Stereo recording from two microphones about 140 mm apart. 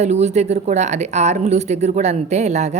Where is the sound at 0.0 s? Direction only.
55° right (ahead or behind).